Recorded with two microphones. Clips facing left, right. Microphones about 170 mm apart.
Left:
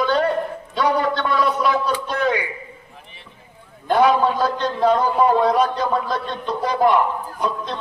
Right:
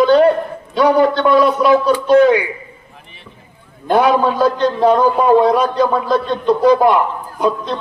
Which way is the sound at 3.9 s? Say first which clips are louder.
Right 3 dB; 80° right.